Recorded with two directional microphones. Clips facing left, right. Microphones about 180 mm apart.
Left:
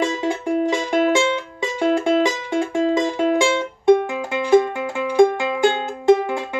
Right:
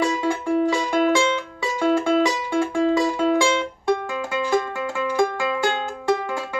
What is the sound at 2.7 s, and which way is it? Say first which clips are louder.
Music: left 1 dB; 20° left (ahead or behind).